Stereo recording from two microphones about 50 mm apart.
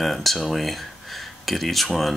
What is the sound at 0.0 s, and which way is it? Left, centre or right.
Speech, centre.